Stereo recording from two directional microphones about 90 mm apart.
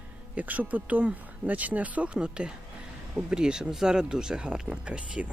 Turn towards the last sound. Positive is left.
turn(degrees=-10)  # may be behind; listen again after turning